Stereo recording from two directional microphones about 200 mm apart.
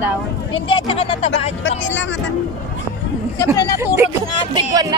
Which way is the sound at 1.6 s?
65° left (ahead or behind).